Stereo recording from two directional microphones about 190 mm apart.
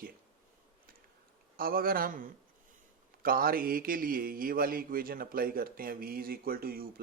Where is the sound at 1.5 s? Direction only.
50° right (ahead or behind).